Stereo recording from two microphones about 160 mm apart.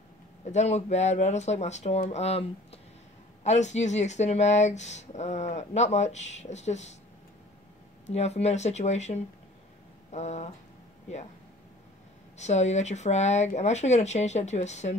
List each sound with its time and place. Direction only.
0.5 s speech: 45° left (ahead or behind)
8.1 s speech: 40° left (ahead or behind)
12.4 s speech: 45° left (ahead or behind)